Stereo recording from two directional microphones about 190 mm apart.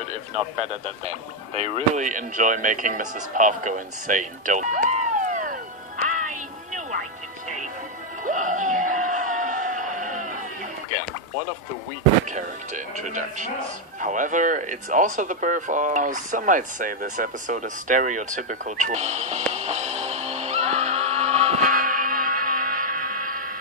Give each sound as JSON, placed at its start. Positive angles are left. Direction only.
{"t": 1.0, "sound": "speech", "side_deg": -35}
{"t": 8.2, "sound": "a sound", "side_deg": -40}
{"t": 12.3, "sound": "speech", "side_deg": -40}
{"t": 19.5, "sound": "music", "side_deg": -35}